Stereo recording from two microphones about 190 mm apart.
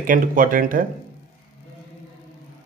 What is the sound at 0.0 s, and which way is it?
Speech, 45° right (ahead or behind).